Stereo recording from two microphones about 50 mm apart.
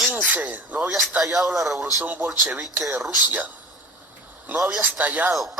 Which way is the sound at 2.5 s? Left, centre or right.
Right.